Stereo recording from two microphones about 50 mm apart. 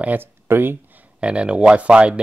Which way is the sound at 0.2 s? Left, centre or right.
Right.